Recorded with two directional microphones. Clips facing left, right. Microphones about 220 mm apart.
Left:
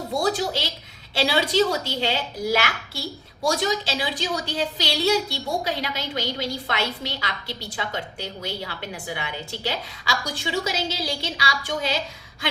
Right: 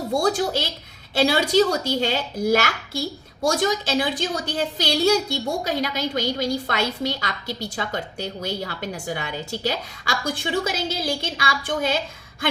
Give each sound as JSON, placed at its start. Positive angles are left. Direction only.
{"t": 0.2, "sound": "speech", "side_deg": -50}